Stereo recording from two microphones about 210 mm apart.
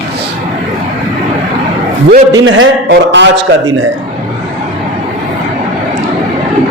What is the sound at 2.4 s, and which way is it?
Speech, 75° right (ahead or behind).